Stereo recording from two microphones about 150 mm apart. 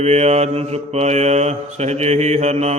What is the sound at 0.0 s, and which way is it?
Mantra, 45° right (ahead or behind).